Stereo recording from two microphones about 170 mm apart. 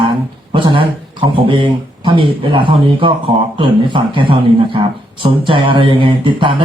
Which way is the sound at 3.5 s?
30° right (ahead or behind).